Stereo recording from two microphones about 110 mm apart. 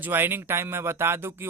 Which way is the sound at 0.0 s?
20° right (ahead or behind).